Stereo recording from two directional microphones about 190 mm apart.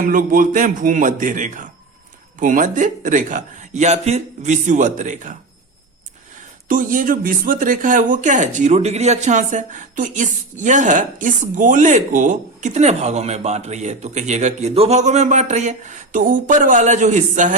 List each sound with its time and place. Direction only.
0.0 s a man's voice: 45° right (ahead or behind)
6.7 s speech: 45° right (ahead or behind)